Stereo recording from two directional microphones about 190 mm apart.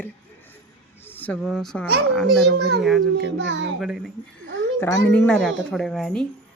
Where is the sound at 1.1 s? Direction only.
10° left (ahead or behind).